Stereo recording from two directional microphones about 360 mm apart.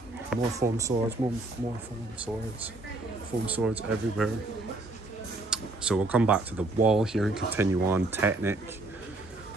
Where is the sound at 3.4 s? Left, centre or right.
Centre.